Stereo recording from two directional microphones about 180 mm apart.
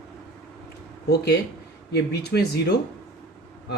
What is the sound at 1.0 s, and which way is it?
Speech, 65° left (ahead or behind).